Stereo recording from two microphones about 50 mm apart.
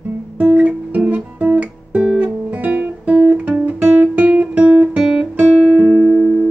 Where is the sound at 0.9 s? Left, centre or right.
Right.